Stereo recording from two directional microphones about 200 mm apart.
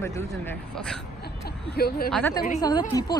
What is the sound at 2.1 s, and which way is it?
Speech, 5° left (ahead or behind).